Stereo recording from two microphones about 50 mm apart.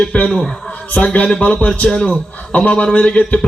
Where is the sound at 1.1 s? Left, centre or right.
Left.